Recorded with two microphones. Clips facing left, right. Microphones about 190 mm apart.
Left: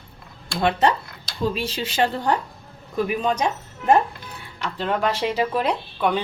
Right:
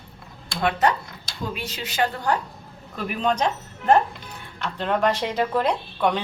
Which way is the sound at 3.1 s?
10° left (ahead or behind).